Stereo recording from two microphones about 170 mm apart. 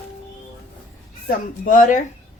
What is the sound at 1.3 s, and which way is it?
Speech, 50° left (ahead or behind).